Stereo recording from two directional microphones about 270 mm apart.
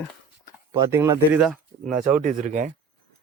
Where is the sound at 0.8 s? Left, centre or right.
Centre.